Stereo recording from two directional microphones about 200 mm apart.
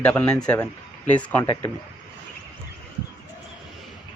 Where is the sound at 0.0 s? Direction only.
5° left (ahead or behind).